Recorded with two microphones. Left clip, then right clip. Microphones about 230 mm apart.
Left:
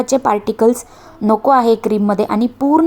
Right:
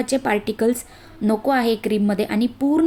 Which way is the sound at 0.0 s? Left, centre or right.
Centre.